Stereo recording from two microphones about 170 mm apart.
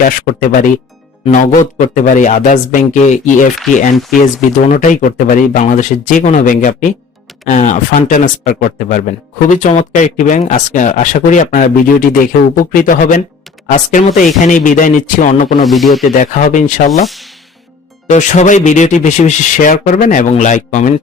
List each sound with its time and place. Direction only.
0.3 s speech: 55° left (ahead or behind)
15.6 s speech: centre (ahead or behind)
16.1 s speech: 45° left (ahead or behind)
16.9 s speech: centre (ahead or behind)
18.1 s speech: 45° left (ahead or behind)